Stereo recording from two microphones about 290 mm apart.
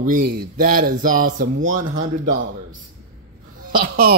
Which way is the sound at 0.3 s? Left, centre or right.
Right.